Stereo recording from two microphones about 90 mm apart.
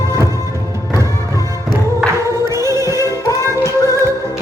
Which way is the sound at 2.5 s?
40° left (ahead or behind).